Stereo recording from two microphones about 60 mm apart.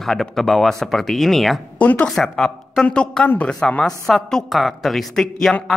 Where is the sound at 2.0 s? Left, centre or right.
Centre.